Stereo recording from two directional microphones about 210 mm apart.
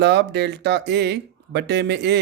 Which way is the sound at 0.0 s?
55° right (ahead or behind).